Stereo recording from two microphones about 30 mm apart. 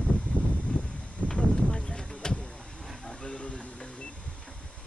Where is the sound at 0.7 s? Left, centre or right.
Left.